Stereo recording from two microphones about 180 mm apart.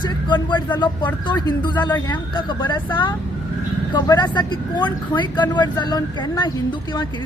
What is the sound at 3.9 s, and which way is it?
Speech, 20° left (ahead or behind).